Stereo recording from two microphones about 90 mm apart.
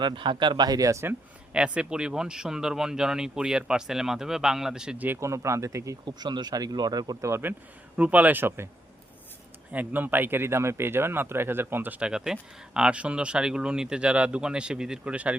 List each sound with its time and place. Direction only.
0.0 s speech: 65° right (ahead or behind); by 1.0 s 40° right (ahead or behind)
1.5 s speech: 10° right (ahead or behind)
5.0 s speech: 30° right (ahead or behind)
6.1 s speech: 55° right (ahead or behind); by 7.5 s 30° right (ahead or behind)
7.9 s speech: 15° right (ahead or behind)
9.7 s speech: 20° right (ahead or behind)